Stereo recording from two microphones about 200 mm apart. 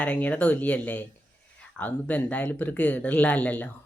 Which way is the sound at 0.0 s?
5° left (ahead or behind).